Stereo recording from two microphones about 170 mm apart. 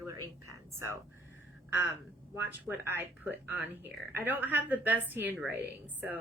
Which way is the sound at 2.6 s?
10° right (ahead or behind).